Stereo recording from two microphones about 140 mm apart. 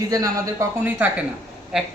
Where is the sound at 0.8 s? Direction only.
15° right (ahead or behind).